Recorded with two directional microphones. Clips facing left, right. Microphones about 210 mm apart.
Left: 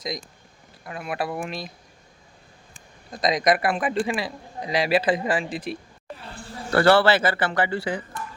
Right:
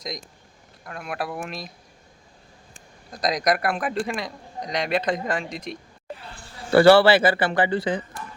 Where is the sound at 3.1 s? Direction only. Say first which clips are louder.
Left 2 dB; centre (ahead or behind).